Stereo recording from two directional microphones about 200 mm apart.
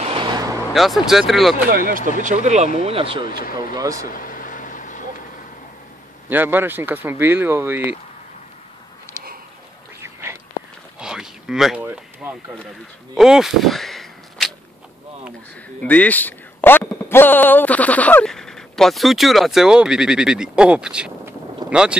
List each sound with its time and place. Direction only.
0.0 s vehicle: 25° right (ahead or behind)
0.7 s speech: centre (ahead or behind)
1.7 s speech: 45° right (ahead or behind)
2.2 s speech: 35° right (ahead or behind)
3.3 s speech: 45° left (ahead or behind)
3.7 s speech: 15° right (ahead or behind)
4.1 s vehicle: 45° left (ahead or behind)
6.2 s speech: 10° right (ahead or behind)
11.0 s a sound: 5° right (ahead or behind)
15.8 s speech: 10° left (ahead or behind)